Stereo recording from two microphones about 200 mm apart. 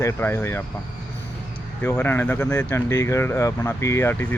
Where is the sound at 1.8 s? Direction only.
10° left (ahead or behind).